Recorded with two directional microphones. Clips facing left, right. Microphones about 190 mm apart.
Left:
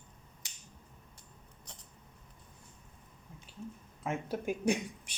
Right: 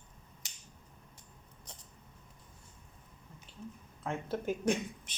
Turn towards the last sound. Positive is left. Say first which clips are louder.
# left 1 dB
turn(degrees=10)  # may be behind; listen again after turning